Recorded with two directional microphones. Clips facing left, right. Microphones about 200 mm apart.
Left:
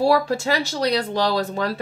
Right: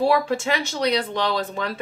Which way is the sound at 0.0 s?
40° left (ahead or behind).